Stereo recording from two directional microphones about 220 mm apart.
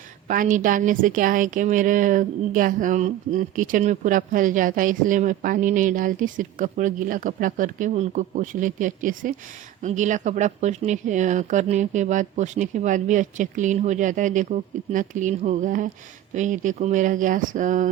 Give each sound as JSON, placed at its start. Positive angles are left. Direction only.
{"t": 0.3, "sound": "a woman's voice", "side_deg": -35}